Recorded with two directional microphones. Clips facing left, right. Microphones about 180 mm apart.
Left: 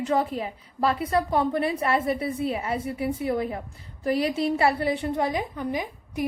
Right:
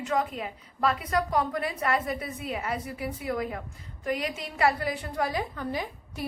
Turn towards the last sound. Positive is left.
turn(degrees=15)  # may be behind; listen again after turning